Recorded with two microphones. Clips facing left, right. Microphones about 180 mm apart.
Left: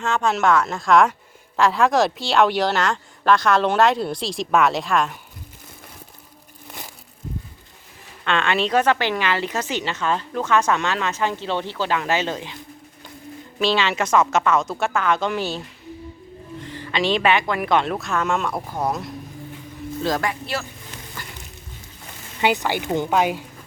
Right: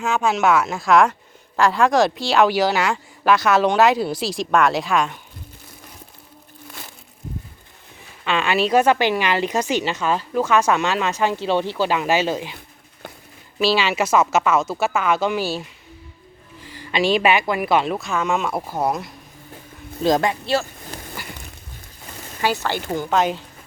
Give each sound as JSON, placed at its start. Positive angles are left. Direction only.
{"t": 0.0, "sound": "speech", "side_deg": -5}
{"t": 8.2, "sound": "a woman's voice", "side_deg": -5}
{"t": 13.6, "sound": "a woman's voice", "side_deg": -10}
{"t": 20.0, "sound": "speech", "side_deg": -20}
{"t": 22.4, "sound": "speech", "side_deg": 20}